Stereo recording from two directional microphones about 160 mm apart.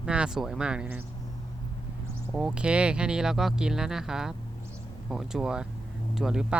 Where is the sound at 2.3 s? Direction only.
5° right (ahead or behind).